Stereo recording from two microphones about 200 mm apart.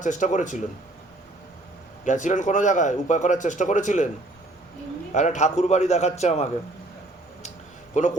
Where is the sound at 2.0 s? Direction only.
40° left (ahead or behind).